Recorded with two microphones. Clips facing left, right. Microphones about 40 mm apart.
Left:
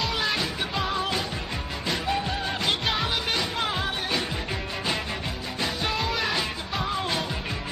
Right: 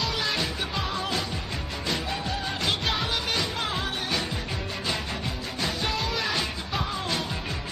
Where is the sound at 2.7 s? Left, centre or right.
Centre.